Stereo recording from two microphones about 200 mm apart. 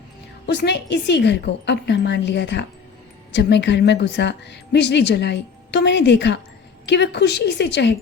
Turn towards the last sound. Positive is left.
turn(degrees=60)  # may be behind; listen again after turning